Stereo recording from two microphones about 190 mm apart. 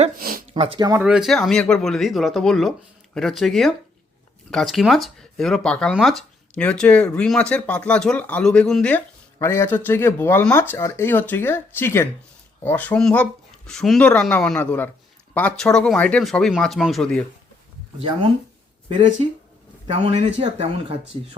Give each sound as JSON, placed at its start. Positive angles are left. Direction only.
{"t": 0.2, "sound": "a sound", "side_deg": -50}
{"t": 0.5, "sound": "speech", "side_deg": -25}
{"t": 1.0, "sound": "speech", "side_deg": -5}
{"t": 18.9, "sound": "speech", "side_deg": -25}